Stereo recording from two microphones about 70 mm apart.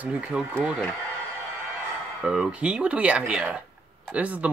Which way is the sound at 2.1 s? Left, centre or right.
Centre.